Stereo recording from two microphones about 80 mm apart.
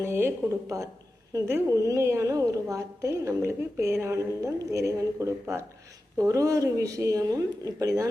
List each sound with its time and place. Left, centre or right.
0.0 s a woman's voice: right
1.5 s a woman's voice: right